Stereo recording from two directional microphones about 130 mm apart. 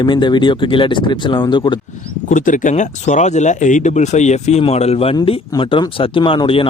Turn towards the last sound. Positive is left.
turn(degrees=45)  # may be behind; listen again after turning